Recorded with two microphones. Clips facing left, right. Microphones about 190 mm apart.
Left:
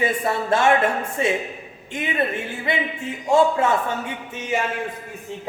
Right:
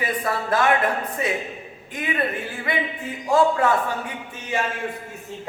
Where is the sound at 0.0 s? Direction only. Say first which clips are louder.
Left 3 dB; 25° left (ahead or behind).